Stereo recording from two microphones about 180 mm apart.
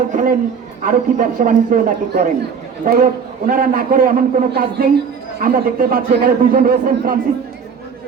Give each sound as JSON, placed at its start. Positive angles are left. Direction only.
{"t": 0.1, "sound": "a man's voice", "side_deg": -45}